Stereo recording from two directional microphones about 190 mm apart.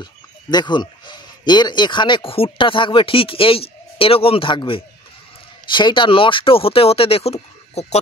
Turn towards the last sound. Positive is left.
turn(degrees=35)  # may be behind; listen again after turning